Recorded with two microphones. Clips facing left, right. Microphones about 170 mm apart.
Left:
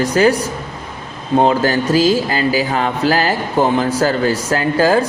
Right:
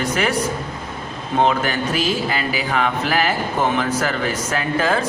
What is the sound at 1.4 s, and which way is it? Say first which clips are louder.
Speech: left 3 dB; 35° left (ahead or behind).